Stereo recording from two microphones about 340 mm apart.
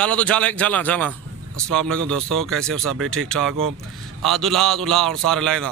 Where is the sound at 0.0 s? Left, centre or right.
Centre.